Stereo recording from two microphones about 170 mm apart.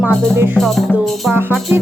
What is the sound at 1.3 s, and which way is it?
Music, 15° right (ahead or behind).